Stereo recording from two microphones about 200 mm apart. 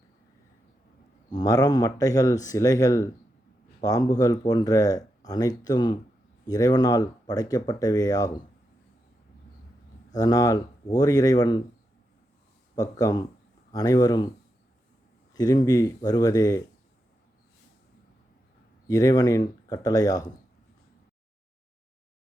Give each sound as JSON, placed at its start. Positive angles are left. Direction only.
{"t": 1.3, "sound": "speech", "side_deg": 20}
{"t": 10.1, "sound": "speech", "side_deg": 20}
{"t": 12.7, "sound": "speech", "side_deg": 20}
{"t": 15.3, "sound": "speech", "side_deg": 20}
{"t": 18.9, "sound": "speech", "side_deg": 20}